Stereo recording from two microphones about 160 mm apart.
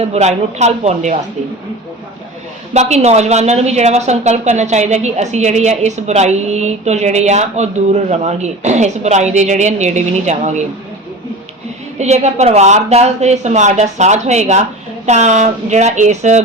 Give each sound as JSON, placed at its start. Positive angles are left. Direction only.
{"t": 0.0, "sound": "a woman's voice", "side_deg": -40}
{"t": 2.7, "sound": "a woman's voice", "side_deg": -45}
{"t": 11.9, "sound": "a woman's voice", "side_deg": -45}